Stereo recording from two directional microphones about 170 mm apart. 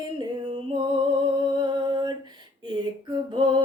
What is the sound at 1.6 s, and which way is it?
Mantra, 25° right (ahead or behind).